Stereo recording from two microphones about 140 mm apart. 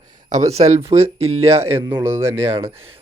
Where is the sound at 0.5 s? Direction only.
45° right (ahead or behind).